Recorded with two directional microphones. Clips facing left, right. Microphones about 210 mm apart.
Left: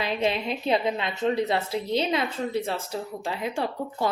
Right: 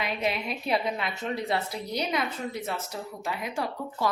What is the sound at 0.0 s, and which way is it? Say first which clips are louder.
A woman's voice: left 4 dB; 30° left (ahead or behind).